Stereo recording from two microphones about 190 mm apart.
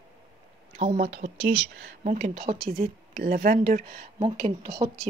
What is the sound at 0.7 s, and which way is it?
Speech, 40° right (ahead or behind).